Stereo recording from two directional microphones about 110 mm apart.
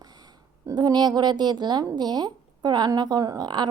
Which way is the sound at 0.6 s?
35° right (ahead or behind).